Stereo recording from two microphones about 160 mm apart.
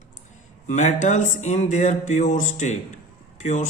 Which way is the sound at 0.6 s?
50° left (ahead or behind).